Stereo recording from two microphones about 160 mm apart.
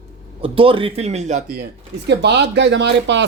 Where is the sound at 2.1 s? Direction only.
90° right.